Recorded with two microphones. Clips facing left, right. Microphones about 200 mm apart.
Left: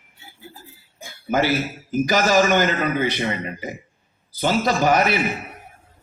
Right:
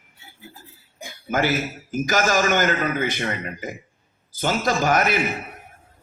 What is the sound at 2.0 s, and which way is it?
A man's voice, 50° right (ahead or behind).